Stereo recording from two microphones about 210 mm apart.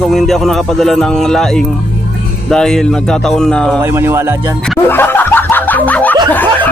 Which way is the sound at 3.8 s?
10° right (ahead or behind).